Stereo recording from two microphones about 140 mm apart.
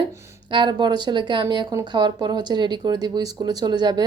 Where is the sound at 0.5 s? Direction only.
35° right (ahead or behind).